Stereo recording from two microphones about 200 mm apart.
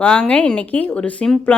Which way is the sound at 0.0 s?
5° left (ahead or behind).